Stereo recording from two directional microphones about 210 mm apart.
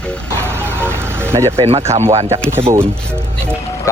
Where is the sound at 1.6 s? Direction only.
30° right (ahead or behind).